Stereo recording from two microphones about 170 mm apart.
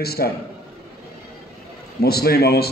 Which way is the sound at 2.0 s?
65° left (ahead or behind).